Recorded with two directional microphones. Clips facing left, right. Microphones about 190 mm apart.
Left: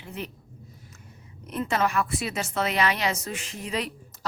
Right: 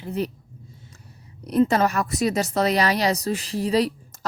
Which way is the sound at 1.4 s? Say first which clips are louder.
Right 7 dB; 35° right (ahead or behind).